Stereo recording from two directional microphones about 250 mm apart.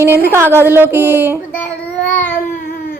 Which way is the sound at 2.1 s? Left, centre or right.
Centre.